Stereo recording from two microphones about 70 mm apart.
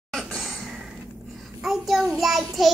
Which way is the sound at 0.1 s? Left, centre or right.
Centre.